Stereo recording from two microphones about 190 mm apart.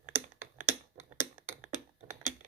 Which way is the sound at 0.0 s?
10° right (ahead or behind).